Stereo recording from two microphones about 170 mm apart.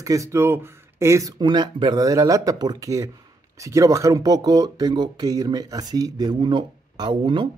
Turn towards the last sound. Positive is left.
turn(degrees=-30)  # may be behind; listen again after turning